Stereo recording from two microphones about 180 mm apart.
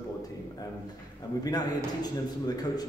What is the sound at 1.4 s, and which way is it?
A man's voice, 20° left (ahead or behind).